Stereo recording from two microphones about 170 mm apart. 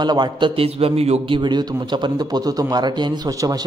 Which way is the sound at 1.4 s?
25° right (ahead or behind).